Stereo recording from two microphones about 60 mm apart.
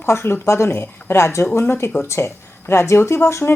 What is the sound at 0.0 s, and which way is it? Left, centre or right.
Speech, left.